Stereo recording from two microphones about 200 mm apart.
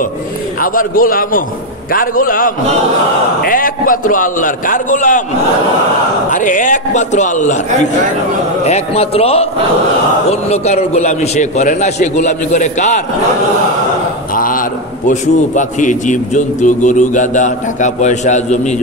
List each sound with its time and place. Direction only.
0.6 s a man's voice: 45° left (ahead or behind)
6.3 s a man's voice: 40° left (ahead or behind)
10.5 s a man's voice: 30° left (ahead or behind)
14.3 s a man's voice: 45° left (ahead or behind)